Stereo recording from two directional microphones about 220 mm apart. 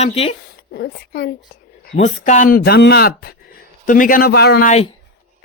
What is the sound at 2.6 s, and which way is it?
Speech, 45° left (ahead or behind).